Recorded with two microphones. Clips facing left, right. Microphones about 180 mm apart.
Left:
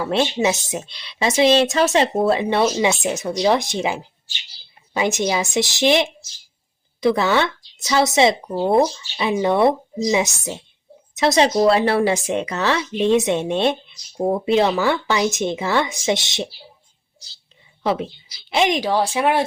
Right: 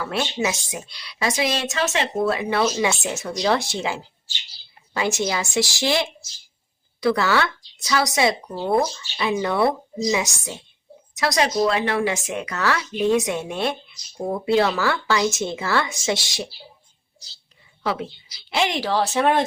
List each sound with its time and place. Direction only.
0.0 s a woman's voice: 25° left (ahead or behind)
17.8 s a woman's voice: 20° left (ahead or behind)